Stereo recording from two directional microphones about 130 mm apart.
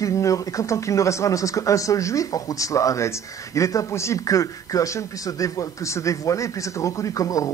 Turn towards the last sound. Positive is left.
turn(degrees=25)  # may be behind; listen again after turning